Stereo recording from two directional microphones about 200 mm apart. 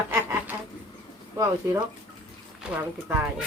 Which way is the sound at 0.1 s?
10° right (ahead or behind).